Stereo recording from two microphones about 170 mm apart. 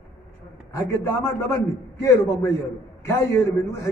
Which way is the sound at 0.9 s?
15° left (ahead or behind).